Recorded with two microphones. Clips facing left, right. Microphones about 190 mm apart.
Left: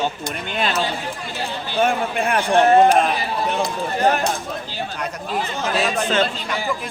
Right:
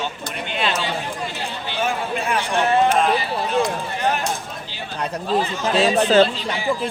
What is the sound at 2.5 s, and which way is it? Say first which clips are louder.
Speech: left 5 dB; 40° left (ahead or behind).